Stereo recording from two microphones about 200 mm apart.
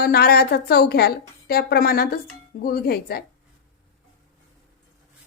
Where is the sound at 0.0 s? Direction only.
50° left (ahead or behind).